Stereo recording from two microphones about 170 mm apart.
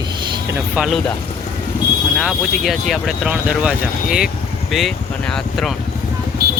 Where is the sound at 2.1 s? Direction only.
Centre (ahead or behind).